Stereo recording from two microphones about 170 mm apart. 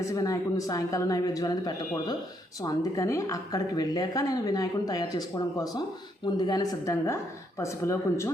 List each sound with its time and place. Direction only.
0.0 s a woman's voice: 20° left (ahead or behind)